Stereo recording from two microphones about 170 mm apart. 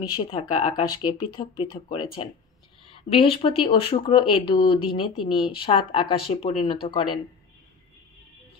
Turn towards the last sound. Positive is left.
turn(degrees=30)  # may be behind; listen again after turning